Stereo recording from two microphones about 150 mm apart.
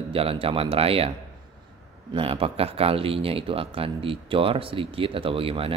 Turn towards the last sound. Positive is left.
turn(degrees=-40)  # may be behind; listen again after turning